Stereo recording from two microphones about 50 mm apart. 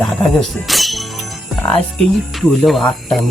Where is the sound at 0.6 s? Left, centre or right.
Centre.